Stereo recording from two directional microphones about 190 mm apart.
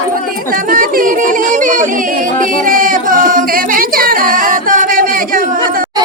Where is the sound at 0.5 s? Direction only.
50° right (ahead or behind).